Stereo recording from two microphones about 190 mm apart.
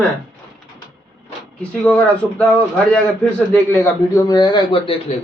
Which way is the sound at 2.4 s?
5° left (ahead or behind).